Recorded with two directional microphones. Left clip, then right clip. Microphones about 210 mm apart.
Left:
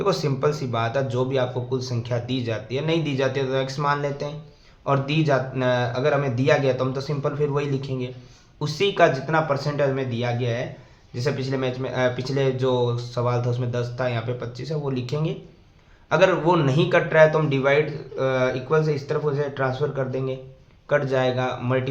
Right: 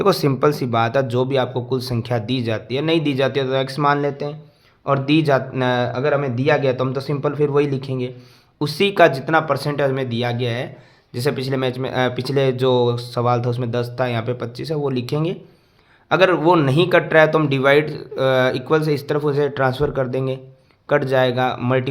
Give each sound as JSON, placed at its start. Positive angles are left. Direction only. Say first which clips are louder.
{"t": 0.0, "sound": "a man's voice", "louder": "right 6 dB", "side_deg": -50}